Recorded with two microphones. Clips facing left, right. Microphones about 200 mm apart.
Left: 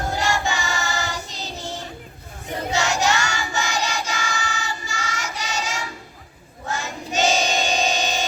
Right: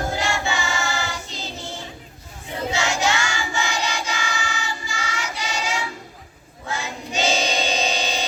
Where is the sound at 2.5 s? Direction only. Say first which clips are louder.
Left 1 dB; 40° left (ahead or behind).